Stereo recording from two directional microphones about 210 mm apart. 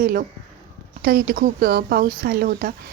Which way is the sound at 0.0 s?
45° right (ahead or behind).